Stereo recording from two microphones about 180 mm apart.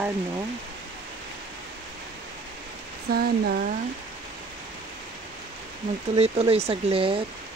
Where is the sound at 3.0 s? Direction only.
60° right (ahead or behind).